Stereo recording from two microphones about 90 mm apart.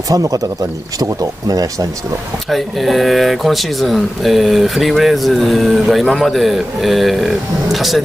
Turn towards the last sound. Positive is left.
turn(degrees=0)  # may be behind; listen again after turning